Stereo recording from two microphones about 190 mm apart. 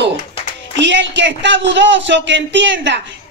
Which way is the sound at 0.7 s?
70° right (ahead or behind).